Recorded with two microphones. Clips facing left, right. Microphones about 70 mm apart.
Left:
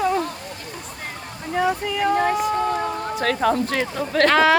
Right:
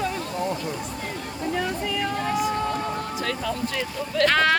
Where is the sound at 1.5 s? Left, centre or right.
Centre.